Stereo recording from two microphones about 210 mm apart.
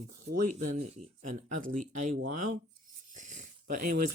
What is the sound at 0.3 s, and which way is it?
Speech, 35° right (ahead or behind).